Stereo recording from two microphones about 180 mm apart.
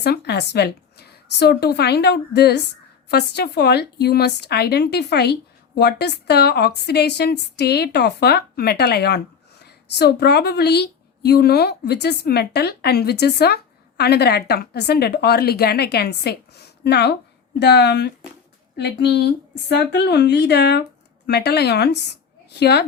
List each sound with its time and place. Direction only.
0.0 s a woman's voice: 65° left (ahead or behind)